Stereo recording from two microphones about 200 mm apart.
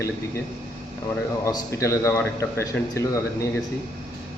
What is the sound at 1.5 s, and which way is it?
Speech, 15° left (ahead or behind).